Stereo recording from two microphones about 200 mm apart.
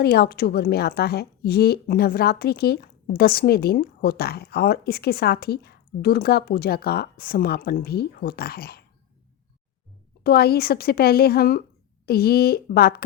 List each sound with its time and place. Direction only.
0.0 s a woman's voice: 50° left (ahead or behind)
10.2 s a woman's voice: 50° left (ahead or behind)